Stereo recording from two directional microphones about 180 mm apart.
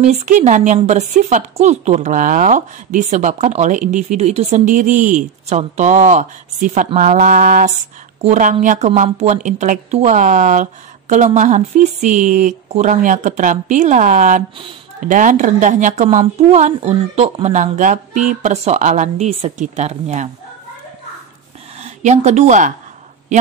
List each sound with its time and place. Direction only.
0.0 s a woman's voice: 40° right (ahead or behind)
21.8 s speech: 40° right (ahead or behind)